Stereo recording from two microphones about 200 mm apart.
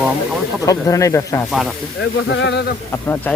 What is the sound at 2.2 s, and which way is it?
Speech, 60° left (ahead or behind).